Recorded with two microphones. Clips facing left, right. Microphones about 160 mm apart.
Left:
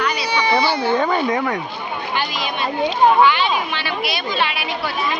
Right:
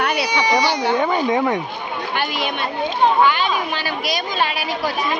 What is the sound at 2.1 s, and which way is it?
Speech, 60° right (ahead or behind).